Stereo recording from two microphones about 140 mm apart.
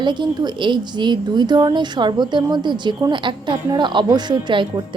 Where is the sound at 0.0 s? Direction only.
35° right (ahead or behind).